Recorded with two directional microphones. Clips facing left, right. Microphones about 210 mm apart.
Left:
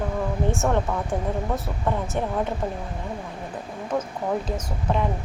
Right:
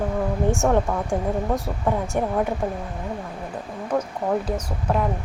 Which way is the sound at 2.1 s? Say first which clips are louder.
Right 3 dB; 10° right (ahead or behind).